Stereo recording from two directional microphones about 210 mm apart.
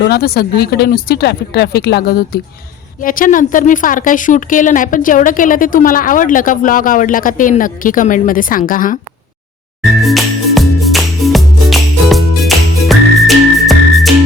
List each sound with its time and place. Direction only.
0.0 s a woman's voice: 50° left (ahead or behind)
9.8 s music: centre (ahead or behind)